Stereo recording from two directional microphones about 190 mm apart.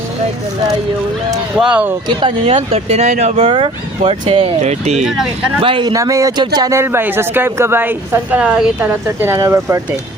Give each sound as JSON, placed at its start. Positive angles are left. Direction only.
{"t": 1.5, "sound": "speech", "side_deg": -5}
{"t": 2.0, "sound": "speech", "side_deg": -25}
{"t": 5.0, "sound": "speech", "side_deg": -5}
{"t": 5.6, "sound": "speech", "side_deg": -25}